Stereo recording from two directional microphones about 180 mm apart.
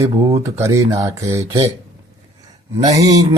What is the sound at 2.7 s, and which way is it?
Speech, 20° right (ahead or behind).